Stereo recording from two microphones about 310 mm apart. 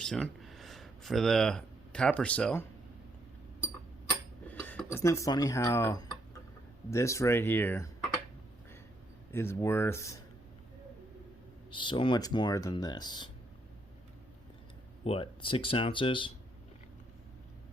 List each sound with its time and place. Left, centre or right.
0.0 s speech: centre
4.4 s speech: centre
9.3 s speech: centre
11.7 s speech: centre
15.0 s speech: centre